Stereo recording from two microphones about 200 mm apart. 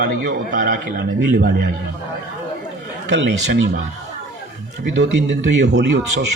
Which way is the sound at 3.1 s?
60° right (ahead or behind).